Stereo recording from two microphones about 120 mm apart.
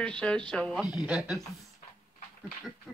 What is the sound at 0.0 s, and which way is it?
Speech, 10° left (ahead or behind).